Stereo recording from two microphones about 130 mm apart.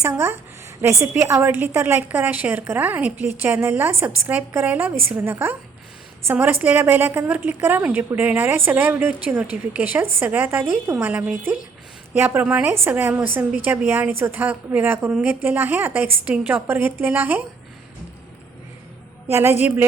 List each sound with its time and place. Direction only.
0.0 s a woman's voice: 20° right (ahead or behind)
19.3 s a woman's voice: 20° right (ahead or behind)